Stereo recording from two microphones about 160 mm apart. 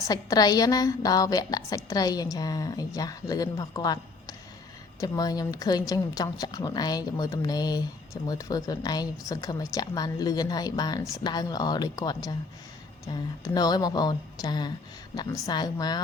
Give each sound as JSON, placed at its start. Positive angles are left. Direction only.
{"t": 0.1, "sound": "a woman's voice", "side_deg": 25}